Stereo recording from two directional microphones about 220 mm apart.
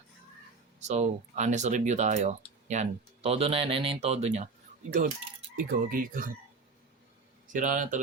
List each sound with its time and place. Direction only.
0.8 s speech: 30° right (ahead or behind)
5.5 s speech: 40° right (ahead or behind)
7.5 s speech: 35° right (ahead or behind)